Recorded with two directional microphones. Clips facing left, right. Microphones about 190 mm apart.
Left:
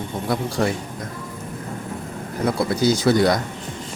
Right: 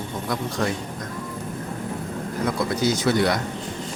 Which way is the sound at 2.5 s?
35° left (ahead or behind).